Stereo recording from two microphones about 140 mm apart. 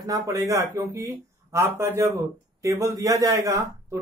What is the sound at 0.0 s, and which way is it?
A man's voice, 25° right (ahead or behind).